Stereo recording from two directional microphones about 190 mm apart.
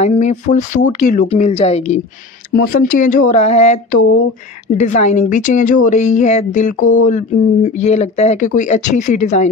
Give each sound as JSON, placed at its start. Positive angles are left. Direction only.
{"t": 0.0, "sound": "a woman's voice", "side_deg": 35}
{"t": 2.5, "sound": "a woman's voice", "side_deg": 45}